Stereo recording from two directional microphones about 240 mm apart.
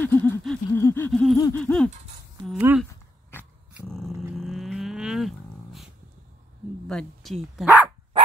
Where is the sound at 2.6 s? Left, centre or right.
Centre.